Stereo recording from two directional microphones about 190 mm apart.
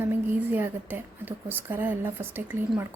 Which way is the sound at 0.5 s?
10° right (ahead or behind).